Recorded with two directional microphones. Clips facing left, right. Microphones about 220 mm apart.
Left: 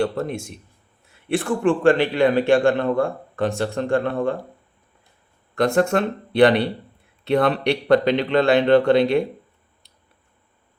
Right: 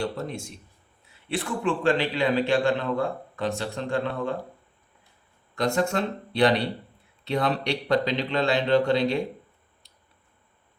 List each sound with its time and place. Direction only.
0.0 s a man's voice: 55° left (ahead or behind)
5.5 s a man's voice: 55° left (ahead or behind)